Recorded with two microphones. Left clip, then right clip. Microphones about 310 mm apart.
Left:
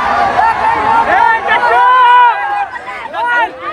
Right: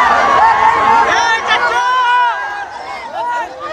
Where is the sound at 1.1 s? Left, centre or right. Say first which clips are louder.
Left 3 dB; centre.